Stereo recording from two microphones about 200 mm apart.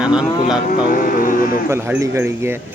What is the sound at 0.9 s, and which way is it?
Music, 45° left (ahead or behind).